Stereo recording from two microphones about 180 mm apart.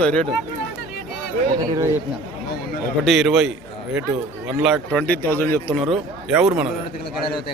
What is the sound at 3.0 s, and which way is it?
Speech, centre (ahead or behind).